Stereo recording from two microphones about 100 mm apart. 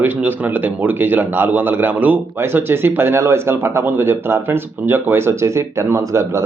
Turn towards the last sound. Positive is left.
turn(degrees=-30)  # may be behind; listen again after turning